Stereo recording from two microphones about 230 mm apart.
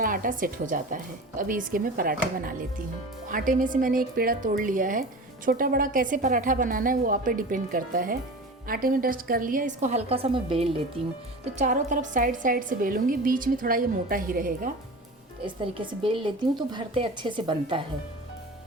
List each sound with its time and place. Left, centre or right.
0.0 s a woman's voice: right
15.4 s a woman's voice: right